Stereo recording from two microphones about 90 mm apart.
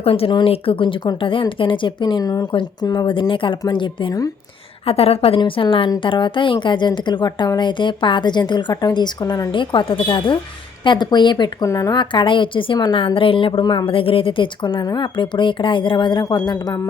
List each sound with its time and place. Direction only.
0.0 s speech: 90° left; by 2.5 s 45° left (ahead or behind)
2.5 s a woman's voice: 60° left (ahead or behind)
4.9 s a woman's voice: 90° left
5.4 s speech: 75° left (ahead or behind)
6.0 s a woman's voice: 65° left (ahead or behind); by 9.5 s 50° left (ahead or behind)
9.5 s a woman's voice: 65° left (ahead or behind); by 11.9 s 40° left (ahead or behind)
11.9 s speech: 65° left (ahead or behind)
13.1 s a woman's voice: 80° left
13.6 s a woman's voice: 60° left (ahead or behind)